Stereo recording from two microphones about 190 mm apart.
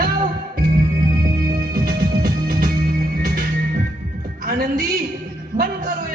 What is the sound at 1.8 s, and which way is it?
Music, 50° right (ahead or behind).